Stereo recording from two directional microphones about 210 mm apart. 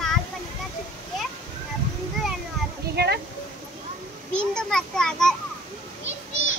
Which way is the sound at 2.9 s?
50° right (ahead or behind).